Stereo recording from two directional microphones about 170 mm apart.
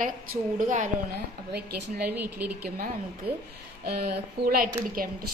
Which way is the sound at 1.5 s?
70° right (ahead or behind).